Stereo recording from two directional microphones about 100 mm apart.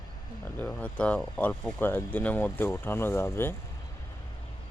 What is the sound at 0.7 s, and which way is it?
Speech, 15° left (ahead or behind).